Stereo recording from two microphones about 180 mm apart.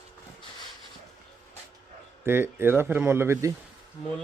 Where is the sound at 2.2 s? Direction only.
10° right (ahead or behind).